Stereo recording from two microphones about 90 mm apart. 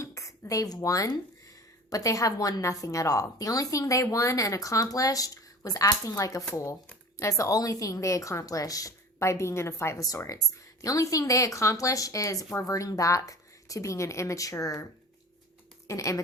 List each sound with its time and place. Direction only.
0.0 s a sound: 35° left (ahead or behind)
1.9 s speech: 40° left (ahead or behind)
15.9 s speech: 35° left (ahead or behind)